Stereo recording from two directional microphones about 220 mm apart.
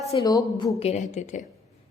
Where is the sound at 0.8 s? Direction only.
30° left (ahead or behind).